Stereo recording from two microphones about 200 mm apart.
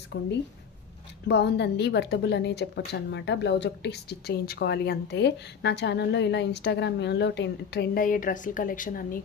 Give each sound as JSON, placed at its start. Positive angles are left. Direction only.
{"t": 0.1, "sound": "a woman's voice", "side_deg": 60}